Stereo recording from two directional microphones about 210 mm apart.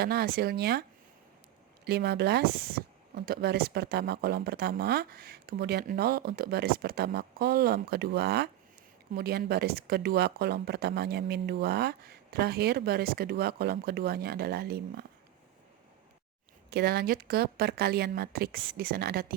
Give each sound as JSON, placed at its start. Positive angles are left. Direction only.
{"t": 0.0, "sound": "speech", "side_deg": -50}
{"t": 16.6, "sound": "speech", "side_deg": -50}